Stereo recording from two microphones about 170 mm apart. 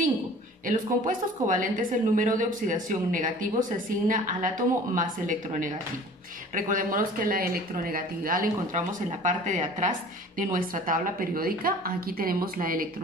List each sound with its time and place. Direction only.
0.7 s a woman's voice: 50° right (ahead or behind)